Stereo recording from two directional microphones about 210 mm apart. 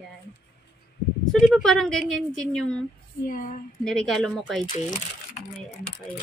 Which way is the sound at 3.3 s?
40° left (ahead or behind).